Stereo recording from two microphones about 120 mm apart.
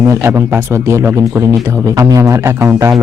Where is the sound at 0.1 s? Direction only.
20° right (ahead or behind).